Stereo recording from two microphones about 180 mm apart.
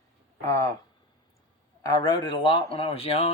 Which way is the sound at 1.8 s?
20° left (ahead or behind).